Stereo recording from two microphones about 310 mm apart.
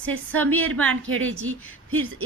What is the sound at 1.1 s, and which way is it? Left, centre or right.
Speech, right.